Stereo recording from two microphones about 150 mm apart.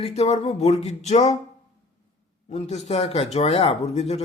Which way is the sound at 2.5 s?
45° left (ahead or behind).